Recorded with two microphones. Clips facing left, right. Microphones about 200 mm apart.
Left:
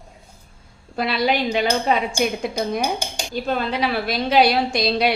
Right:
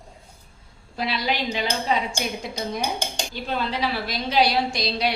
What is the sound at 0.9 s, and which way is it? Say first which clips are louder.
A woman's voice: left 6 dB; 55° left (ahead or behind).